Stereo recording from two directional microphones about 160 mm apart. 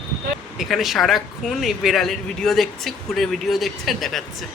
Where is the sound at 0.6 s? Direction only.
Centre (ahead or behind).